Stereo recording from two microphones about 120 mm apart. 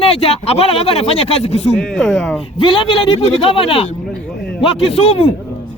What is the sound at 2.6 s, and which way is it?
Speech, 45° left (ahead or behind).